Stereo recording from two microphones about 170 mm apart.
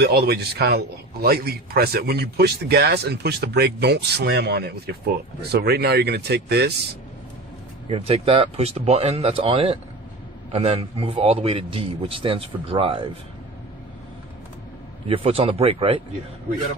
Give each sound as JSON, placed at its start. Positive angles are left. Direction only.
{"t": 0.0, "sound": "a man's voice", "side_deg": -70}
{"t": 7.9, "sound": "a man's voice", "side_deg": -35}
{"t": 15.0, "sound": "a man's voice", "side_deg": -35}